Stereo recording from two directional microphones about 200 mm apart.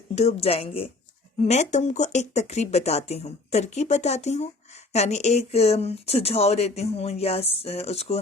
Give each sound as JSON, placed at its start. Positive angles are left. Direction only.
{"t": 0.2, "sound": "speech", "side_deg": 30}